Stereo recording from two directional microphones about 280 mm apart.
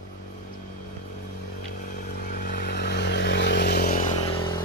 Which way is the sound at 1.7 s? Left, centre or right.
Left.